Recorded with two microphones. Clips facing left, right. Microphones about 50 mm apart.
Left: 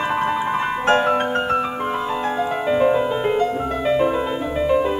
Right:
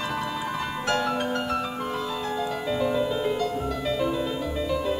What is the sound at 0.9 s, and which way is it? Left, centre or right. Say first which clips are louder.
Music: left 9 dB; left.